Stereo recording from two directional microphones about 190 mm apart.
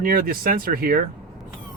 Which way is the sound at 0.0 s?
50° right (ahead or behind).